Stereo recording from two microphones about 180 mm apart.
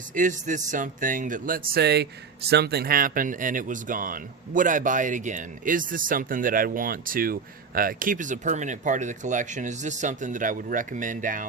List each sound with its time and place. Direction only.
0.1 s speech: 45° right (ahead or behind)